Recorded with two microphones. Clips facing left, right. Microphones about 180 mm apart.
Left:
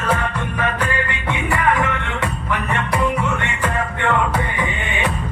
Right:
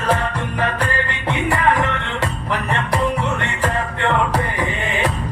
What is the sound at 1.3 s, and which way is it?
Music, 35° right (ahead or behind).